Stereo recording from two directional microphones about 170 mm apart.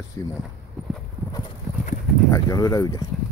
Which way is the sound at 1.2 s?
10° left (ahead or behind).